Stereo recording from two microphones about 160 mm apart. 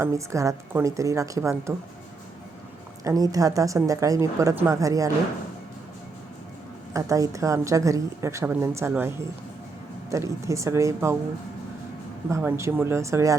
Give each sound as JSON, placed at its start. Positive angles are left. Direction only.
{"t": 0.0, "sound": "a woman's voice", "side_deg": -20}
{"t": 3.0, "sound": "a woman's voice", "side_deg": -20}
{"t": 6.9, "sound": "a woman's voice", "side_deg": -20}
{"t": 12.3, "sound": "speech", "side_deg": -15}